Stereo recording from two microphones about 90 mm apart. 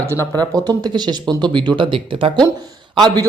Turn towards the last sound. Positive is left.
turn(degrees=-50)  # may be behind; listen again after turning